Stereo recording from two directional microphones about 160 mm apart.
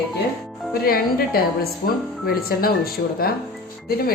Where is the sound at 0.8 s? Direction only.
70° left (ahead or behind).